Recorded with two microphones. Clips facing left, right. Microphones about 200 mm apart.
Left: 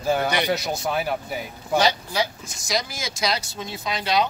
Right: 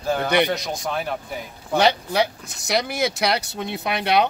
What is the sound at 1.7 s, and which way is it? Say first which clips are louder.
Speech: right 3 dB; 60° right (ahead or behind).